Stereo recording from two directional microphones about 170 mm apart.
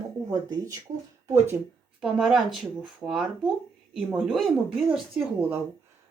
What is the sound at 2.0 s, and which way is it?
A woman's voice, 5° right (ahead or behind).